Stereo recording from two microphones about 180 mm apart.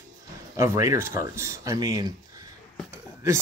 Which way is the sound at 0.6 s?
15° right (ahead or behind).